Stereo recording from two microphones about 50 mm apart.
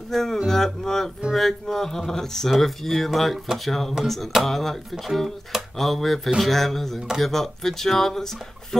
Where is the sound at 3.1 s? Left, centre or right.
Centre.